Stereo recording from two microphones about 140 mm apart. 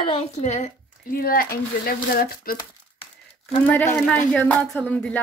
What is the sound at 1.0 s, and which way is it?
Speech, 90° left.